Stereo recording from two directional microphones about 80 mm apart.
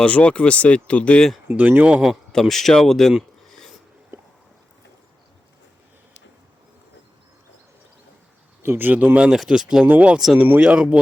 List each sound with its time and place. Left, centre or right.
0.0 s speech: centre
1.5 s speech: right
2.0 s speech: centre
3.1 s a sound: centre
8.6 s speech: right